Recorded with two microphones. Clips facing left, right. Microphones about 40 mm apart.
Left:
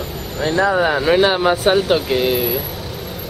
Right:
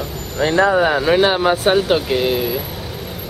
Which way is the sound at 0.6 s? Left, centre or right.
Centre.